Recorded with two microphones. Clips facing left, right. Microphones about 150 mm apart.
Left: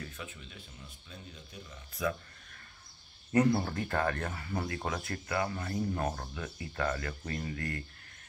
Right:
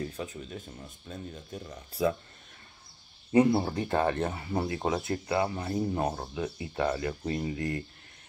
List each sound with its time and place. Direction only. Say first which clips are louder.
0.0 s speech: right 9 dB; 35° right (ahead or behind)
2.0 s speech: right 6 dB; 25° right (ahead or behind)
3.3 s speech: right 4 dB; 20° right (ahead or behind)